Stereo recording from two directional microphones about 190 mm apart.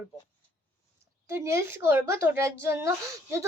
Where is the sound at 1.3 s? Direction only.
15° right (ahead or behind).